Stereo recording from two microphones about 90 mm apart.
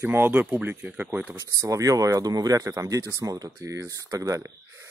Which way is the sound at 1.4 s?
40° right (ahead or behind).